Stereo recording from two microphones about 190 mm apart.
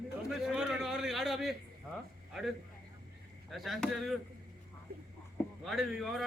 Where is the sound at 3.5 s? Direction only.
Centre (ahead or behind).